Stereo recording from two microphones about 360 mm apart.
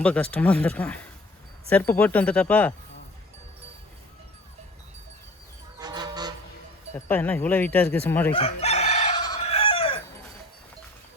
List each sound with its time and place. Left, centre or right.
0.0 s speech: centre
5.8 s vehicle: centre
6.9 s speech: centre
8.4 s chicken: centre